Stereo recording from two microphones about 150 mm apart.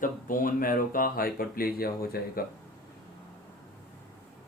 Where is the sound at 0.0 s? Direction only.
65° left (ahead or behind).